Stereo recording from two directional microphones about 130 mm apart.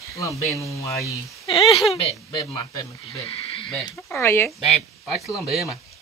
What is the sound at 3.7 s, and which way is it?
Speech, 15° left (ahead or behind).